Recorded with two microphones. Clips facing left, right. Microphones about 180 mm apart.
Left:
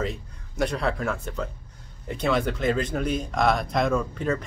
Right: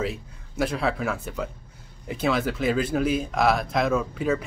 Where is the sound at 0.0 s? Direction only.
5° right (ahead or behind).